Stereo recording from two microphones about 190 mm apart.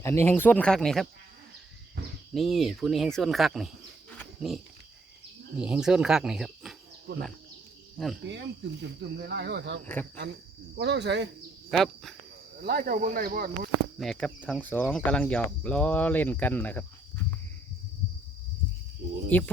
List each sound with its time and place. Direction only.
0.0 s speech: 15° left (ahead or behind)
2.3 s speech: centre (ahead or behind)
7.1 s speech: 55° right (ahead or behind)
7.9 s speech: centre (ahead or behind)
8.8 s speech: 60° right (ahead or behind)
9.8 s speech: 10° left (ahead or behind)
10.8 s speech: 65° right (ahead or behind)
11.7 s speech: centre (ahead or behind)
12.6 s speech: 55° right (ahead or behind)
14.0 s speech: centre (ahead or behind)
19.3 s speech: 10° left (ahead or behind)